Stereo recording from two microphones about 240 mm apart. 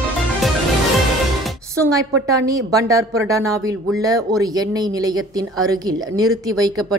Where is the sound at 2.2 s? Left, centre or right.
Centre.